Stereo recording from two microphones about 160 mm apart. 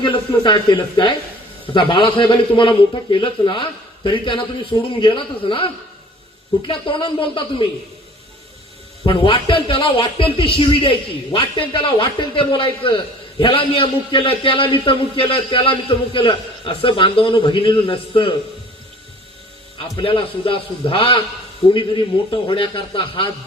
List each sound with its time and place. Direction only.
0.0 s a man's voice: 30° left (ahead or behind)
9.0 s a man's voice: 35° left (ahead or behind)
20.0 s a man's voice: 35° left (ahead or behind)